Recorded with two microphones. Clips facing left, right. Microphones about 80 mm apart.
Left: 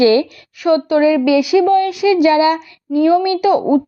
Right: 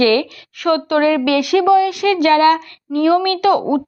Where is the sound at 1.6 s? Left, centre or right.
Right.